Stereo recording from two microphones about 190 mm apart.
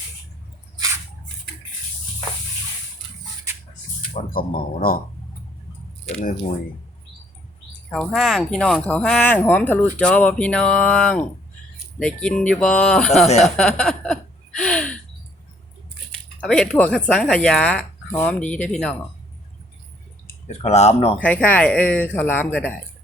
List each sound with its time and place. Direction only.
4.1 s speech: 50° left (ahead or behind)
7.9 s speech: centre (ahead or behind)
13.2 s speech: 35° left (ahead or behind)
13.6 s a sound: 5° left (ahead or behind)
16.1 s speech: 5° left (ahead or behind)
20.5 s speech: 35° left (ahead or behind)
21.2 s speech: 10° left (ahead or behind)